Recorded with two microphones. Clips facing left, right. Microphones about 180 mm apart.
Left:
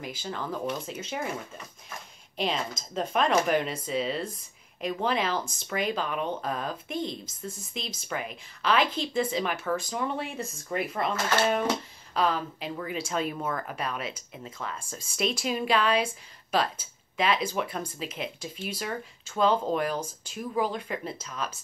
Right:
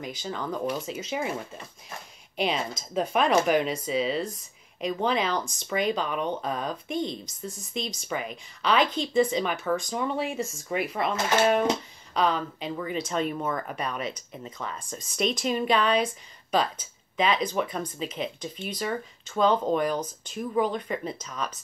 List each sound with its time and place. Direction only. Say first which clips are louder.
0.0 s speech: right 2 dB; centre (ahead or behind)
2.3 s speech: right 2 dB; 5° right (ahead or behind)